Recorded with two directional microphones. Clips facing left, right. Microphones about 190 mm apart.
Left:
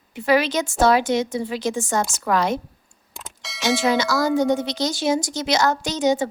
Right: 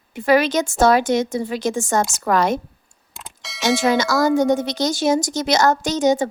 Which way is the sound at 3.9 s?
45° right (ahead or behind).